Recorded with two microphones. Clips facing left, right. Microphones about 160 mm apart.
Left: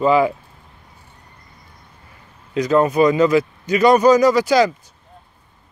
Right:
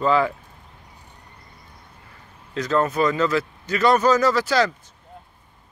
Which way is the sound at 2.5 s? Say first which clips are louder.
Left 6 dB; 15° left (ahead or behind).